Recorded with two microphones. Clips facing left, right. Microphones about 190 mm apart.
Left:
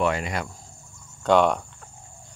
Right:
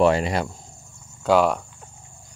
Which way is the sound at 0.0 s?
30° right (ahead or behind).